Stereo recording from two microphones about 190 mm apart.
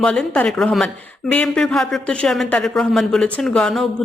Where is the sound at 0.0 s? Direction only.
5° left (ahead or behind).